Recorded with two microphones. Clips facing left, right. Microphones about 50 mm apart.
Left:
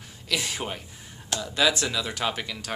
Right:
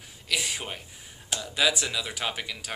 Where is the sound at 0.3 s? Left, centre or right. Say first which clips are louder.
Left 1 dB; centre.